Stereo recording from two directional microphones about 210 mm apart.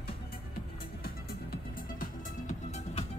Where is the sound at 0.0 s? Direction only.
45° left (ahead or behind).